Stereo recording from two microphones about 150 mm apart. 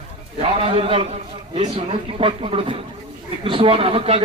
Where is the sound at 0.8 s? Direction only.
40° right (ahead or behind).